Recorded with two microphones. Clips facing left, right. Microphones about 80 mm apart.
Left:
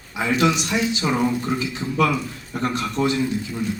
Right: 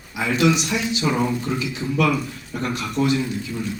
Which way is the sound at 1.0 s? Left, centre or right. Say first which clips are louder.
Even; left.